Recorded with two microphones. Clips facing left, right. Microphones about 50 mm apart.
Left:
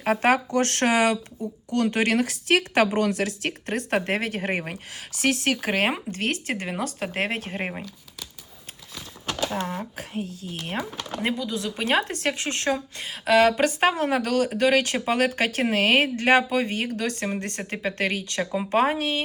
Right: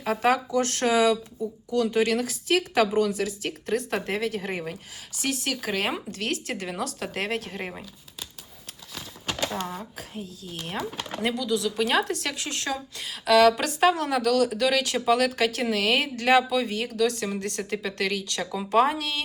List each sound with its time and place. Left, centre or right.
0.0 s speech: left
3.7 s speech: left
5.5 s speech: left
9.5 s speech: left
10.0 s speech: left
10.7 s speech: left